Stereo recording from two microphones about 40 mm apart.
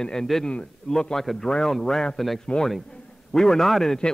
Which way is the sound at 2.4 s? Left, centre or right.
Left.